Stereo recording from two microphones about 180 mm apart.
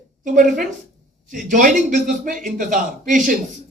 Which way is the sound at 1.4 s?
45° right (ahead or behind).